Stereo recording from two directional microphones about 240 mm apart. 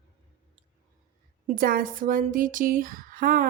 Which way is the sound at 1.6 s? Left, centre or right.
Right.